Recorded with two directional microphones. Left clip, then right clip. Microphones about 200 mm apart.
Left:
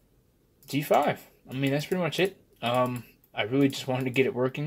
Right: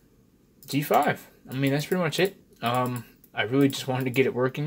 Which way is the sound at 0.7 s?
Centre (ahead or behind).